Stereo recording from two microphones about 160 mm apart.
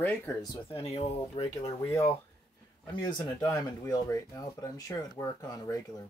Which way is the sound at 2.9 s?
30° left (ahead or behind).